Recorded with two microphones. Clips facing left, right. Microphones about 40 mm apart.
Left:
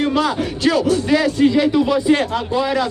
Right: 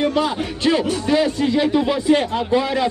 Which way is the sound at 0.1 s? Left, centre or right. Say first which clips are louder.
Left 2 dB; right.